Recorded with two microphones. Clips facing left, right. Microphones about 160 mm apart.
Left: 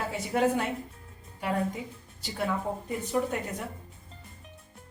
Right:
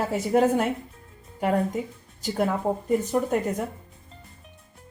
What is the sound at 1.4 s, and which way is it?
Speech, 50° right (ahead or behind).